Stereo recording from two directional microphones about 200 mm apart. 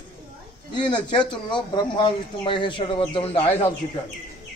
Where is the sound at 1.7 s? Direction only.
25° left (ahead or behind).